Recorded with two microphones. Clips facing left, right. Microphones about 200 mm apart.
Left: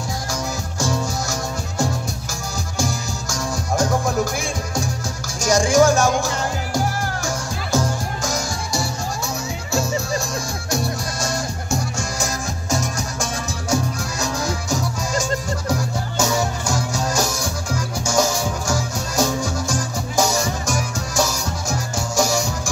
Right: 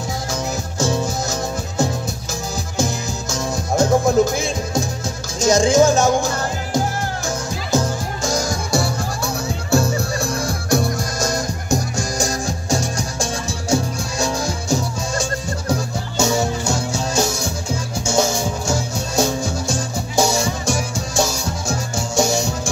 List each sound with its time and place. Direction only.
0.3 s music: 20° right (ahead or behind)
2.8 s music: 20° right (ahead or behind)
8.2 s music: 35° right (ahead or behind)
8.7 s music: 55° right (ahead or behind); by 22.5 s 25° right (ahead or behind)